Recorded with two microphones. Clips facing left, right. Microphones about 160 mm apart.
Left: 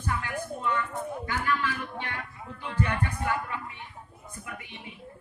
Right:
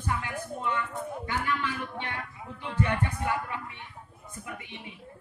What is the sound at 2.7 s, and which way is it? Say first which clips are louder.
Speech: right 1 dB; 25° right (ahead or behind).